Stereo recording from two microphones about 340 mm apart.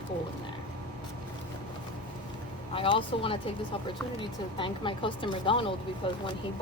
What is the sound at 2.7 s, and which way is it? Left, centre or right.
Speech, centre.